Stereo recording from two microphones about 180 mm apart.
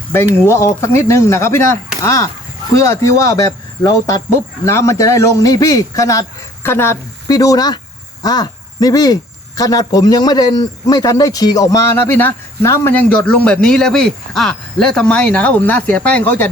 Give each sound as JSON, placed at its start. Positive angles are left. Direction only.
{"t": 0.4, "sound": "a man's voice", "side_deg": 15}